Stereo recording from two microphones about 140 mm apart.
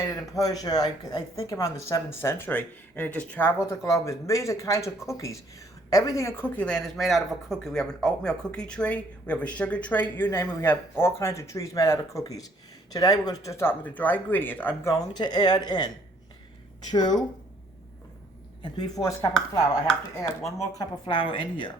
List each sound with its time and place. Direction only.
0.0 s speech: 25° left (ahead or behind)
14.9 s speech: 30° left (ahead or behind)
16.9 s speech: 30° left (ahead or behind)
18.6 s speech: 30° left (ahead or behind)
20.6 s speech: 30° left (ahead or behind)